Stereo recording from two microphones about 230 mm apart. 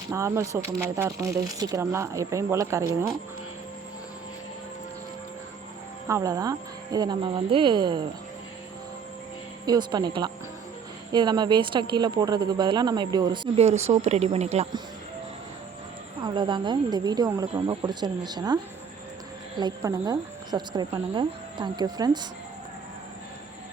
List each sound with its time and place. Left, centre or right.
0.1 s speech: centre
6.1 s speech: centre
9.6 s speech: centre
16.2 s speech: right